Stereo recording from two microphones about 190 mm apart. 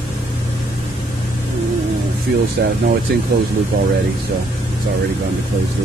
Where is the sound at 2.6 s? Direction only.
60° right (ahead or behind).